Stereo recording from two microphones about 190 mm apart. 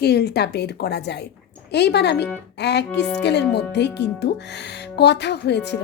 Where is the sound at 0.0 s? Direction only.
60° left (ahead or behind).